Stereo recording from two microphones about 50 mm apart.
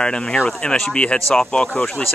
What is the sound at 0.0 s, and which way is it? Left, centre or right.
Speech, centre.